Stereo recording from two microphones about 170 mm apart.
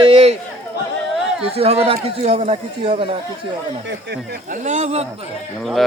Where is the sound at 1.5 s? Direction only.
35° right (ahead or behind).